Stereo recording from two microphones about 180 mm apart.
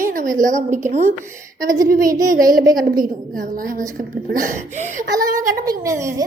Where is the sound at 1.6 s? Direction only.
20° right (ahead or behind).